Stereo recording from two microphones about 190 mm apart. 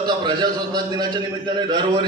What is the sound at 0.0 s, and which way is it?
A man's voice, 20° right (ahead or behind).